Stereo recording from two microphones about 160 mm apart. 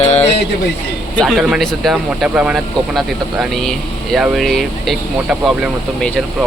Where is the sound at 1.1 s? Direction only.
Centre (ahead or behind).